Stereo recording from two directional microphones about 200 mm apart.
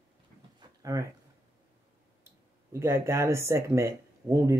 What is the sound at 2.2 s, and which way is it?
Speech, 15° right (ahead or behind).